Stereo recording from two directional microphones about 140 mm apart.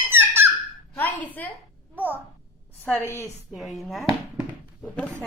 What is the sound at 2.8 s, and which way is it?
Speech, 15° left (ahead or behind).